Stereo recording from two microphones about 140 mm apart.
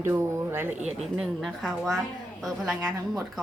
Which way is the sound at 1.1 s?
Centre (ahead or behind).